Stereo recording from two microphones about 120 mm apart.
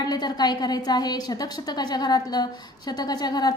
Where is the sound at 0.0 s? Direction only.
35° left (ahead or behind).